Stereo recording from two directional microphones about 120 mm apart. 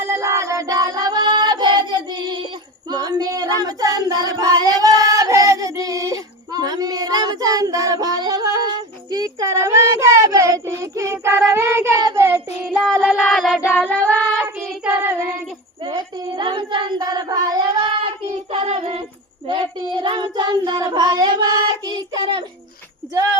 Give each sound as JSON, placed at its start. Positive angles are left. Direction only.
{"t": 0.1, "sound": "child singing", "side_deg": -25}
{"t": 12.6, "sound": "music", "side_deg": -5}
{"t": 13.1, "sound": "a sound", "side_deg": 0}
{"t": 13.6, "sound": "child singing", "side_deg": 15}
{"t": 14.4, "sound": "child singing", "side_deg": -20}
{"t": 15.8, "sound": "child singing", "side_deg": -35}
{"t": 18.5, "sound": "music", "side_deg": -50}
{"t": 19.5, "sound": "child singing", "side_deg": -45}